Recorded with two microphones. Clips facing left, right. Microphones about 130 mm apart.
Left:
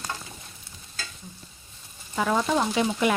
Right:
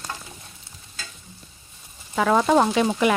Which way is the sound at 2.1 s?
80° right.